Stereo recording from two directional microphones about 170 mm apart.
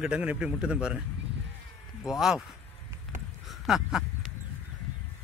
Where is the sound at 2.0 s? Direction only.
Centre (ahead or behind).